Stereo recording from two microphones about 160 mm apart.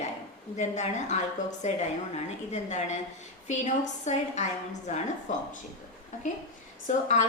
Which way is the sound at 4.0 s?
45° left (ahead or behind).